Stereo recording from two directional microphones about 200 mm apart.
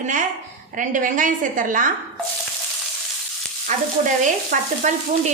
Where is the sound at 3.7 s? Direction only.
40° right (ahead or behind).